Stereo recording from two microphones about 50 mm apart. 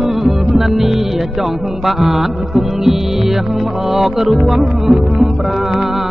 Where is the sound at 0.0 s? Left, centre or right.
Centre.